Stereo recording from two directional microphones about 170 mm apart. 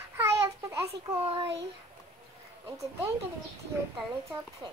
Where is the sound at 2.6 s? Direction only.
15° right (ahead or behind).